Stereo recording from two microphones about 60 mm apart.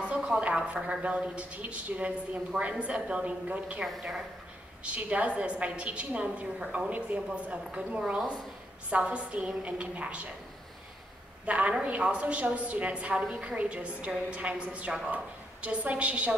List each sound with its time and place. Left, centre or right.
0.0 s a woman's voice: centre
4.8 s a woman's voice: right
11.4 s a woman's voice: right